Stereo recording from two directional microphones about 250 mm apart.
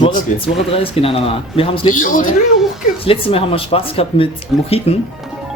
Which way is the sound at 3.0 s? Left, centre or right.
Left.